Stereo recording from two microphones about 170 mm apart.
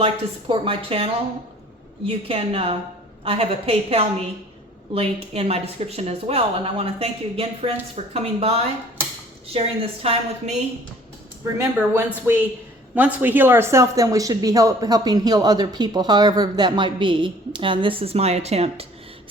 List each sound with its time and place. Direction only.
0.0 s speech: 30° right (ahead or behind)
11.5 s speech: 15° right (ahead or behind); by 18.9 s 40° right (ahead or behind)